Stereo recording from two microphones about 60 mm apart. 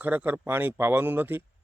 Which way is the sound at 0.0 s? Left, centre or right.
Right.